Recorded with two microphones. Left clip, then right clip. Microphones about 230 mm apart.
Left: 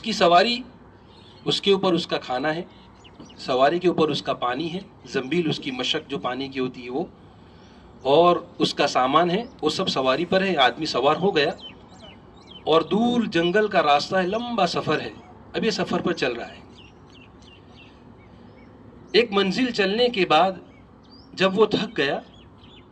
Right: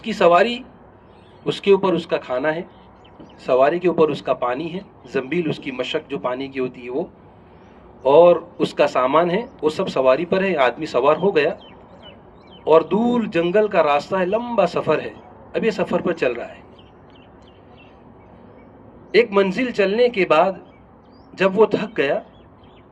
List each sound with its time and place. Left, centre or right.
0.0 s a man's voice: left
12.6 s a man's voice: left
19.1 s a man's voice: left